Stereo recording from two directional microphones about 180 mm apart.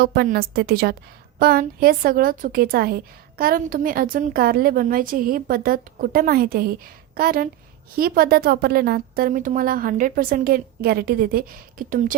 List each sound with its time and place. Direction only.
0.0 s a woman's voice: 55° right (ahead or behind)